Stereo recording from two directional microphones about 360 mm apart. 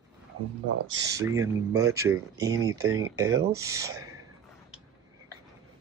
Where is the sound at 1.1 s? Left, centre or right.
Centre.